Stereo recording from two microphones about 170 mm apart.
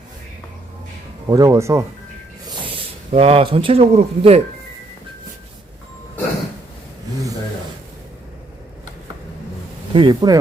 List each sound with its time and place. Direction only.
1.3 s speech: 20° right (ahead or behind)
2.6 s speech: 30° right (ahead or behind)
9.9 s speech: 25° right (ahead or behind)